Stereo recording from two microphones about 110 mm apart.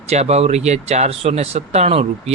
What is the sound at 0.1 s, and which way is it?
Speech, 80° right.